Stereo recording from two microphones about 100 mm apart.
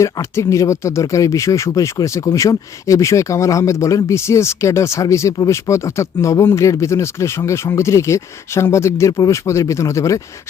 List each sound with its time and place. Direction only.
0.0 s speech: 30° left (ahead or behind)